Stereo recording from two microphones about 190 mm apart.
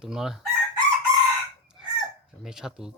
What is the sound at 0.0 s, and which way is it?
Speech, centre (ahead or behind).